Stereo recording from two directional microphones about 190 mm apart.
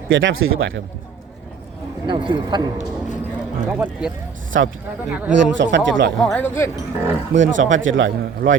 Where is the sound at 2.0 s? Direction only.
25° right (ahead or behind).